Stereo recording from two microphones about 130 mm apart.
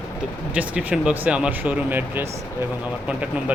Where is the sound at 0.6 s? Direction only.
5° right (ahead or behind).